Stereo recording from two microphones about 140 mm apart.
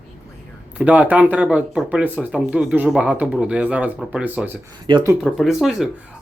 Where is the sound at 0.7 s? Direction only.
10° right (ahead or behind).